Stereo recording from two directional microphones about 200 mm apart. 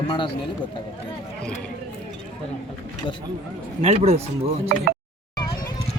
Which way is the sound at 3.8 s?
30° right (ahead or behind).